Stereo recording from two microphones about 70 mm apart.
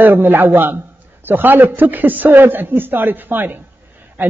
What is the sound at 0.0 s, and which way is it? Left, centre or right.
A man's voice, right.